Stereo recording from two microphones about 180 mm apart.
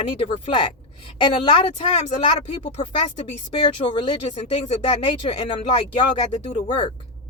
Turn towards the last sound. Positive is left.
turn(degrees=30)  # may be behind; listen again after turning